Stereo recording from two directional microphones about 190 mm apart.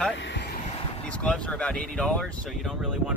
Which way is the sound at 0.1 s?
70° left (ahead or behind).